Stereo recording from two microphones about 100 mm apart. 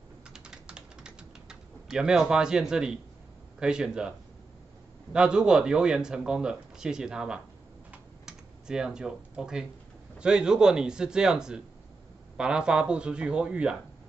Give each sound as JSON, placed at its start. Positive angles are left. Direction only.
{"t": 0.3, "sound": "typing", "side_deg": -10}
{"t": 3.5, "sound": "speech", "side_deg": -10}
{"t": 5.1, "sound": "speech", "side_deg": -10}
{"t": 7.9, "sound": "typing", "side_deg": -5}
{"t": 10.1, "sound": "speech", "side_deg": -10}